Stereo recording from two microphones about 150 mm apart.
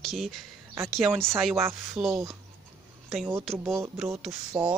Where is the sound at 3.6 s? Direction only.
20° right (ahead or behind).